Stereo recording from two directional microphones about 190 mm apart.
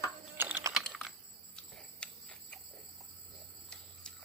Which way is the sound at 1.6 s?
5° left (ahead or behind).